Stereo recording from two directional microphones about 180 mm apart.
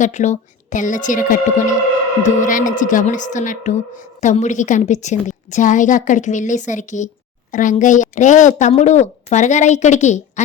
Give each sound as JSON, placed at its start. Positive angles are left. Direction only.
{"t": 0.0, "sound": "a woman's voice", "side_deg": 40}